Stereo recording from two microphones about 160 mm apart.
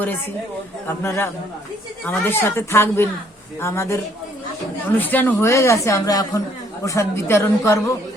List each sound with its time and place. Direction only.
1.0 s a woman's voice: 15° left (ahead or behind)